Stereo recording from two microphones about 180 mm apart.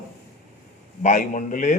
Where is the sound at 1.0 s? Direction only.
45° left (ahead or behind).